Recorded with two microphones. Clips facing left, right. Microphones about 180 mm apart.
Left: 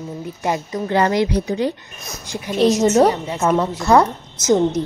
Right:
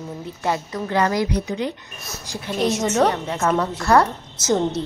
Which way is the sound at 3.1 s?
5° left (ahead or behind).